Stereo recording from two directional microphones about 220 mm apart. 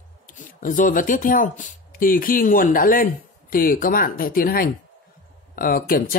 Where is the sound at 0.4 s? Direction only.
35° left (ahead or behind).